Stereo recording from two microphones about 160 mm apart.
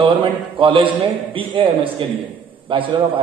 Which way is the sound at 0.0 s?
30° right (ahead or behind).